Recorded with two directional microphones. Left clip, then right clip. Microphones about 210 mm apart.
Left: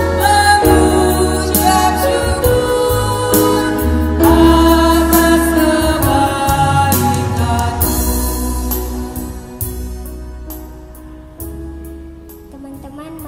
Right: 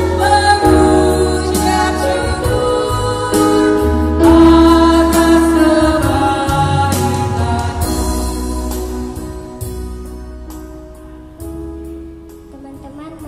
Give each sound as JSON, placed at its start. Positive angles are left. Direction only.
{"t": 0.2, "sound": "music", "side_deg": 50}